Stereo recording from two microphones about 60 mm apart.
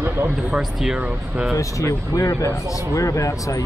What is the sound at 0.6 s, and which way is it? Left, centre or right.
Speech, centre.